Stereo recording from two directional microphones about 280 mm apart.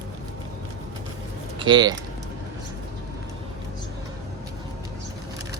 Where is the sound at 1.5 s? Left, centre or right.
Centre.